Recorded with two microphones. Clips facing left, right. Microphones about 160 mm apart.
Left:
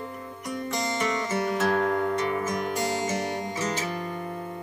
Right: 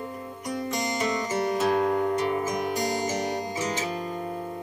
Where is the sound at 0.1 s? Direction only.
20° right (ahead or behind).